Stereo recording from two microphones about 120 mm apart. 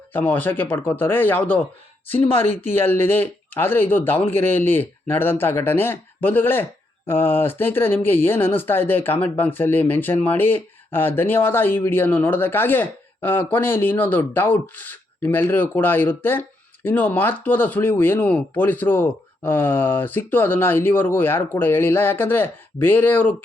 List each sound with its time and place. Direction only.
0.1 s speech: 15° left (ahead or behind)